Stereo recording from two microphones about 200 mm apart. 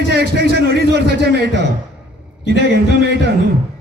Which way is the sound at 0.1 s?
55° right (ahead or behind).